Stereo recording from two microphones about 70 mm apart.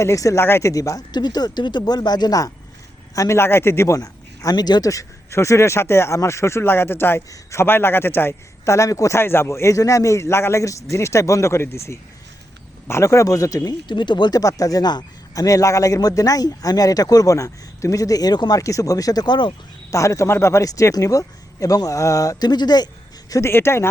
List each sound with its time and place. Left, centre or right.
0.0 s a man's voice: left
0.4 s a man's voice: left
0.7 s speech: left
1.1 s speech: left
1.8 s speech: left
3.2 s a man's voice: left
4.9 s a man's voice: left
9.1 s a man's voice: left
15.4 s a man's voice: left
16.0 s speech: left
19.9 s a man's voice: left
23.4 s a man's voice: left